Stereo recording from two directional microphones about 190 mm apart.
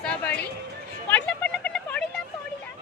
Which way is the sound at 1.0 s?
10° left (ahead or behind).